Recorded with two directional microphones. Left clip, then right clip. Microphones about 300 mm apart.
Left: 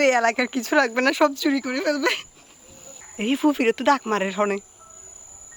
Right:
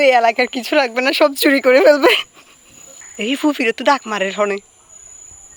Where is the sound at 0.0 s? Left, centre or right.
Centre.